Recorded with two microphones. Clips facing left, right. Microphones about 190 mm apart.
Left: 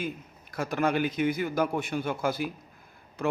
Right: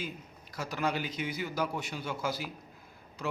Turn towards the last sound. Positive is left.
turn(degrees=55)  # may be behind; listen again after turning